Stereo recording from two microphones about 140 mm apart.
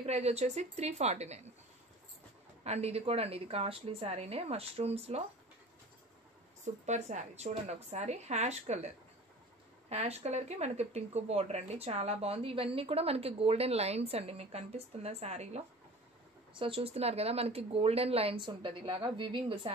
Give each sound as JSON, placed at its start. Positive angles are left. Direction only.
{"t": 0.0, "sound": "speech", "side_deg": -50}
{"t": 2.6, "sound": "speech", "side_deg": -50}
{"t": 6.6, "sound": "speech", "side_deg": -60}
{"t": 16.5, "sound": "speech", "side_deg": -40}